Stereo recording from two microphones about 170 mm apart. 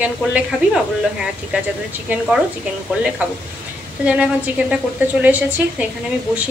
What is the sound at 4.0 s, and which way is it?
A woman's voice, 5° right (ahead or behind).